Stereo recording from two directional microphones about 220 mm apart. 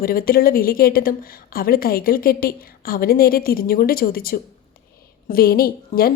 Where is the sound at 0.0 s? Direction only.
40° left (ahead or behind).